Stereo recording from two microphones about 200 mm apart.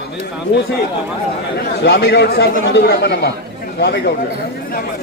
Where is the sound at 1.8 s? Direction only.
55° left (ahead or behind).